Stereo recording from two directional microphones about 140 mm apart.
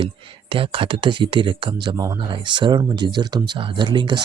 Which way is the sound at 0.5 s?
40° right (ahead or behind).